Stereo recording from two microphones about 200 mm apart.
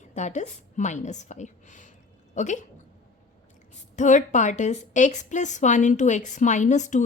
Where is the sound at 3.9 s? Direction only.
40° left (ahead or behind).